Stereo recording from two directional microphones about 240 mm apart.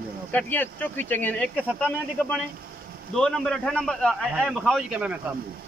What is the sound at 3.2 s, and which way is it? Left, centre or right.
A man's voice, centre.